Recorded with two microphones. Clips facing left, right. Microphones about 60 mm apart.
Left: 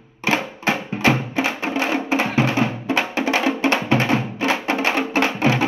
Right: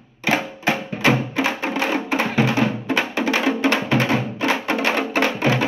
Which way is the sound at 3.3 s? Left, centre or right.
Left.